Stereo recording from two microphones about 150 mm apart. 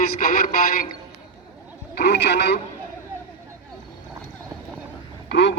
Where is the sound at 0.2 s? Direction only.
65° left (ahead or behind).